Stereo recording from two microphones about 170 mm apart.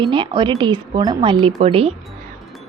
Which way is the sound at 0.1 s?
30° right (ahead or behind).